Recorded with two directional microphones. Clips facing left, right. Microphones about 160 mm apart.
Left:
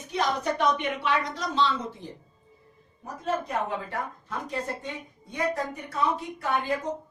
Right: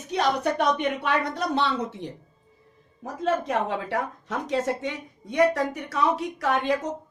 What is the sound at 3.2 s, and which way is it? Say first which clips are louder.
A woman's voice: right 4 dB; 90° right.